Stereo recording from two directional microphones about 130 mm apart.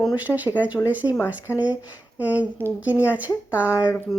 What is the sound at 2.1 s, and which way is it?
Speech, 10° right (ahead or behind).